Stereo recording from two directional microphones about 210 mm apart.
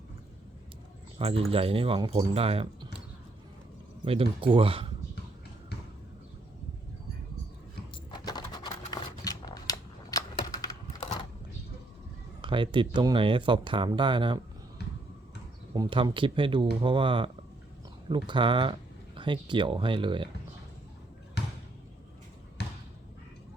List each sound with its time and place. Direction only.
1.2 s speech: 25° right (ahead or behind)
4.0 s speech: 25° right (ahead or behind)
8.1 s scissors: 20° left (ahead or behind)
12.4 s speech: 25° right (ahead or behind)
14.8 s a sound: 50° left (ahead or behind)
15.7 s speech: 20° right (ahead or behind)
22.6 s basketball bounce: 50° left (ahead or behind)